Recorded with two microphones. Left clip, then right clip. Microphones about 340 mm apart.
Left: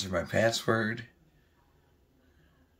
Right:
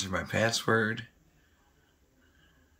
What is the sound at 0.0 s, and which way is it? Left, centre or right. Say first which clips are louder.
Speech: left 2 dB; centre.